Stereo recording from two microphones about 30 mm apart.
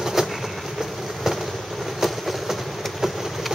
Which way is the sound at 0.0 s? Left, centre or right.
Centre.